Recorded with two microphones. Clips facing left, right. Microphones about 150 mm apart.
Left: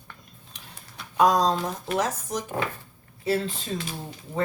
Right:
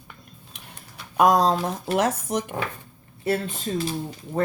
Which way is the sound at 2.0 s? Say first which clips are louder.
Right 5 dB; 65° right (ahead or behind).